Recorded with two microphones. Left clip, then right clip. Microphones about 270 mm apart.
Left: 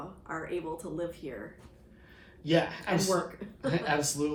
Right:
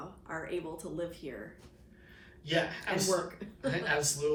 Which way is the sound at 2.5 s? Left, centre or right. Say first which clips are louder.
Left 4 dB; centre.